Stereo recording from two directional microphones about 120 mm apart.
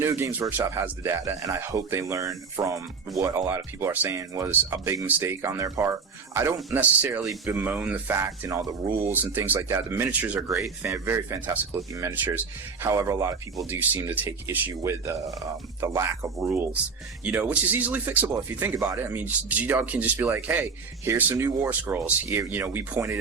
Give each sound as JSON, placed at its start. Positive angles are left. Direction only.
{"t": 0.0, "sound": "speech", "side_deg": -20}
{"t": 7.3, "sound": "speech", "side_deg": -25}
{"t": 7.6, "sound": "speech", "side_deg": -15}
{"t": 17.2, "sound": "speech", "side_deg": -15}